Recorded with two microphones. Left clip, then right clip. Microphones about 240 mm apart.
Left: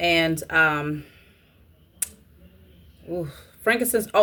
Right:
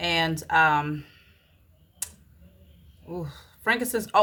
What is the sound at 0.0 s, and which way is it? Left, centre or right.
A woman's voice, centre.